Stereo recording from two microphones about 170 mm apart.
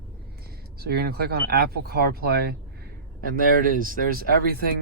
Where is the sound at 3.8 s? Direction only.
60° right (ahead or behind).